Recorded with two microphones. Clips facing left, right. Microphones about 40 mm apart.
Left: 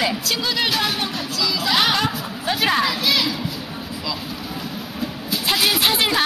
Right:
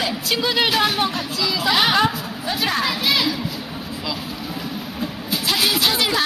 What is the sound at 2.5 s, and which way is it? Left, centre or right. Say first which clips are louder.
Speech: left 3 dB; centre.